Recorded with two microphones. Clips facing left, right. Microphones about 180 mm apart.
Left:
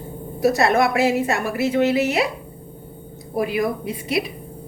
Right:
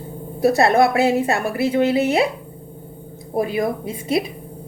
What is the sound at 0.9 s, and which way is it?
A woman's voice, 30° right (ahead or behind).